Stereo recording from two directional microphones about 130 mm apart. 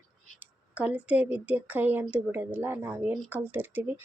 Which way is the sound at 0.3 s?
10° right (ahead or behind).